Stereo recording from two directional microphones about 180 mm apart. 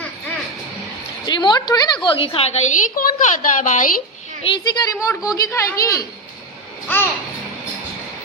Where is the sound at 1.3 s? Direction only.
25° left (ahead or behind).